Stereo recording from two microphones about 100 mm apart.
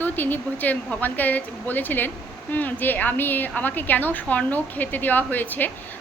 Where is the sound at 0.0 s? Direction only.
20° left (ahead or behind).